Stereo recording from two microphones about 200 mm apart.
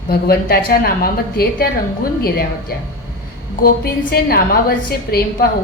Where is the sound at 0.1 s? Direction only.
50° left (ahead or behind).